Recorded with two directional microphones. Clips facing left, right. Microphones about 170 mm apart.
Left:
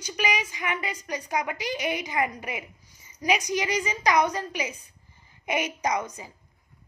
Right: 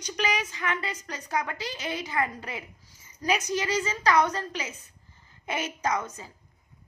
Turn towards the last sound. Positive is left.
turn(degrees=15)  # may be behind; listen again after turning